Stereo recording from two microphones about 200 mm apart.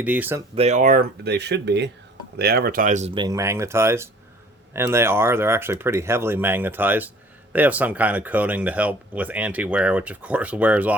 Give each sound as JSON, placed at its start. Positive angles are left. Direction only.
{"t": 0.0, "sound": "speech", "side_deg": -10}
{"t": 0.5, "sound": "speech", "side_deg": -30}
{"t": 3.2, "sound": "speech", "side_deg": -15}